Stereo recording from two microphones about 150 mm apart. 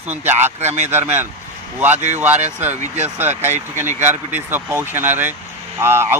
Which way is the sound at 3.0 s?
15° right (ahead or behind).